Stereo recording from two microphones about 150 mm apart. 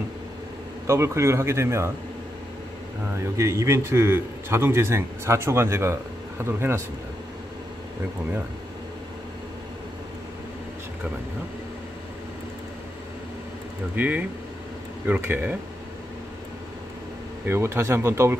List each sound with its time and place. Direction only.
0.8 s speech: 20° right (ahead or behind)
3.3 s a man's voice: 20° right (ahead or behind)
13.9 s a man's voice: 10° right (ahead or behind)
17.5 s a man's voice: 15° right (ahead or behind)